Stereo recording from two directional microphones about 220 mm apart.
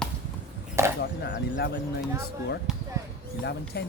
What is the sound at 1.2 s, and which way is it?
Speech, 50° left (ahead or behind).